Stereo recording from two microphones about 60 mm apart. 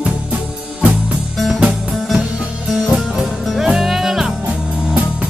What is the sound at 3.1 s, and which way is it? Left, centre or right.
Music, centre.